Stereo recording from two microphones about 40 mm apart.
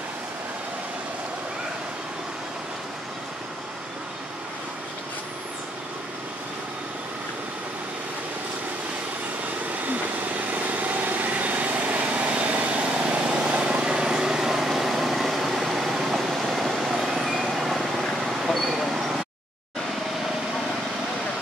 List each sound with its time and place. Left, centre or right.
9.8 s vehicle: right; by 15.9 s centre
15.9 s air conditioning: centre
16.2 s a sound: centre
16.6 s vehicle: centre